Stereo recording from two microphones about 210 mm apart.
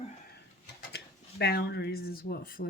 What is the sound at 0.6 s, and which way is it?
Speech, 50° left (ahead or behind).